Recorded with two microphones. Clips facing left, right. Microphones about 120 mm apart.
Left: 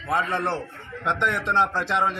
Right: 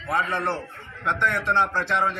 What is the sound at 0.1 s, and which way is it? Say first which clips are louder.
A man's voice: left 1 dB; 20° left (ahead or behind).